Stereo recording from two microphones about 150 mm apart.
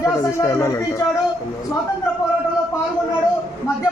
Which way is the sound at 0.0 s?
20° left (ahead or behind).